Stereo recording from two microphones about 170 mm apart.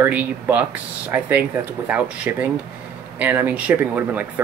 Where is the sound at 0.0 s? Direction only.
10° right (ahead or behind).